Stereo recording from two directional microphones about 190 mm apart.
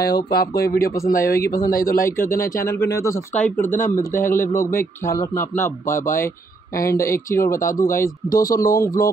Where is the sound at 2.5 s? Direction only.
15° left (ahead or behind).